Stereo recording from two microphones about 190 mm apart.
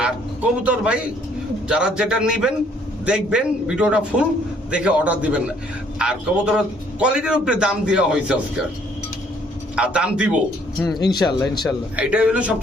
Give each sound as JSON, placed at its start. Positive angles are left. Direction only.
{"t": 0.0, "sound": "a man's voice", "side_deg": -5}
{"t": 9.7, "sound": "a man's voice", "side_deg": -5}
{"t": 10.8, "sound": "speech", "side_deg": 20}
{"t": 11.9, "sound": "a man's voice", "side_deg": -5}